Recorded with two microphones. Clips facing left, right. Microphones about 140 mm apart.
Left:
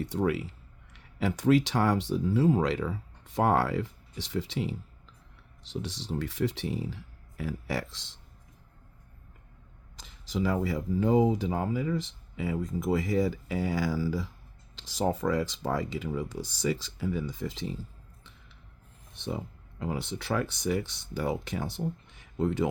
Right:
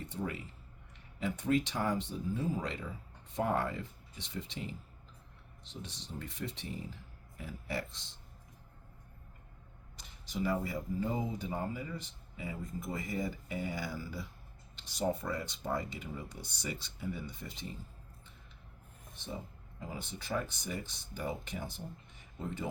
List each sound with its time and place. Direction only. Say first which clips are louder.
0.0 s speech: left 11 dB; 90° left
10.0 s speech: left 6 dB; 90° left
19.1 s speech: left 8 dB; 80° left